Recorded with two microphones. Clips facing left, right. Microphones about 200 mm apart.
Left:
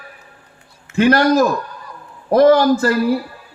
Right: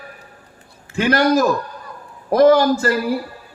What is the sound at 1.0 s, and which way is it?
Speech, 55° left (ahead or behind).